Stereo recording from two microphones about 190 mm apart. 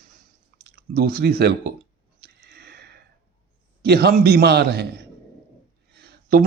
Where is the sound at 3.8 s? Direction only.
55° right (ahead or behind).